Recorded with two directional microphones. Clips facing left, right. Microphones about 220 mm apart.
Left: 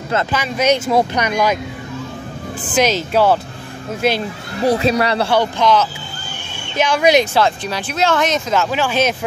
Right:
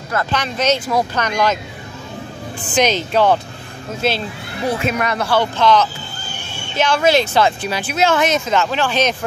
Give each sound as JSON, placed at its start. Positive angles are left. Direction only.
{"t": 0.3, "sound": "speech", "side_deg": 10}
{"t": 2.7, "sound": "speech", "side_deg": 5}
{"t": 4.6, "sound": "speech", "side_deg": 35}
{"t": 5.3, "sound": "speech", "side_deg": 10}
{"t": 7.3, "sound": "speech", "side_deg": -5}